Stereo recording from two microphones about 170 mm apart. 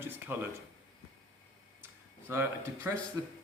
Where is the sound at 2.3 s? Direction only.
15° right (ahead or behind).